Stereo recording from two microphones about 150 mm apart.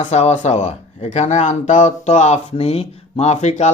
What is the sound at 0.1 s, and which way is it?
Speech, 45° left (ahead or behind).